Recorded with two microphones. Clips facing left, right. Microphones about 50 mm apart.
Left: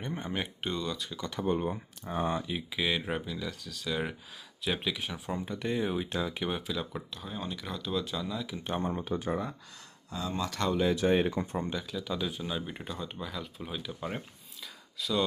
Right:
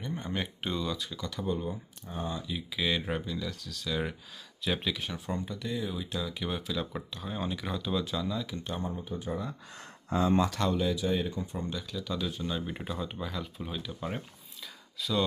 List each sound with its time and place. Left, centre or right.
0.2 s speech: centre
1.4 s speech: left
2.5 s speech: left
2.8 s speech: centre
5.5 s speech: left
6.5 s speech: centre
6.9 s speech: centre
8.9 s speech: left
10.1 s speech: right
10.5 s speech: centre
10.9 s speech: left
11.5 s speech: left
11.8 s speech: centre